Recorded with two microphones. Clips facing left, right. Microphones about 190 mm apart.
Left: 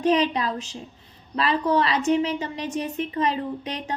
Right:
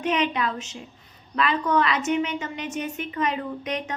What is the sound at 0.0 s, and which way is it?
Speech, 35° left (ahead or behind).